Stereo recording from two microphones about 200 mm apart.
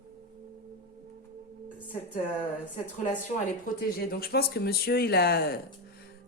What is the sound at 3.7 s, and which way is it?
Speech, 45° left (ahead or behind).